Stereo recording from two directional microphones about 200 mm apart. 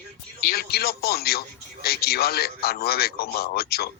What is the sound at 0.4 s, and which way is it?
A man's voice, 50° left (ahead or behind).